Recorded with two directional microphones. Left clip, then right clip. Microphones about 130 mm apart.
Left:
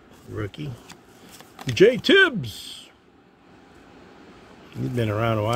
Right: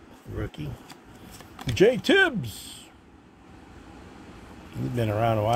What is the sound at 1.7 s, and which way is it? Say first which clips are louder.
Speech: left 4 dB; 90° left.